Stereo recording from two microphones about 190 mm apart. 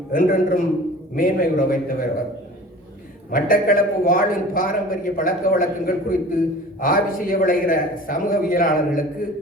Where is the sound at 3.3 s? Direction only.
50° left (ahead or behind).